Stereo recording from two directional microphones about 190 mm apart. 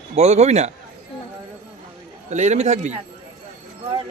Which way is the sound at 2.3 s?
35° right (ahead or behind).